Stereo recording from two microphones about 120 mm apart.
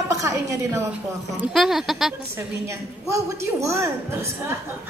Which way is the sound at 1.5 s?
Centre (ahead or behind).